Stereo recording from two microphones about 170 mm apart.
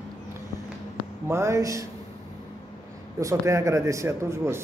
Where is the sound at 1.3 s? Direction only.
15° right (ahead or behind).